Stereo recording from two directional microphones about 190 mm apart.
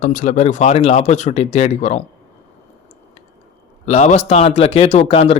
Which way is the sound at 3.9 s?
35° left (ahead or behind).